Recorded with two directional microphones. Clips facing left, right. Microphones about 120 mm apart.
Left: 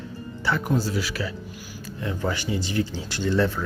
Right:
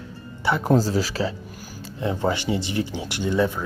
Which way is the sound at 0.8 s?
35° right (ahead or behind).